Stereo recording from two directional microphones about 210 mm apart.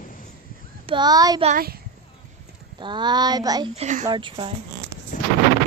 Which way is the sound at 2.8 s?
20° right (ahead or behind).